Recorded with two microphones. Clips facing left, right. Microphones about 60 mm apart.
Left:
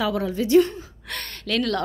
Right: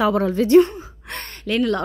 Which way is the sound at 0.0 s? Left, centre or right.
Right.